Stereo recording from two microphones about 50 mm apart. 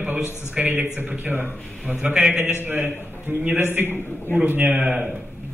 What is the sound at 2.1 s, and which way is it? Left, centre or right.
Speech, right.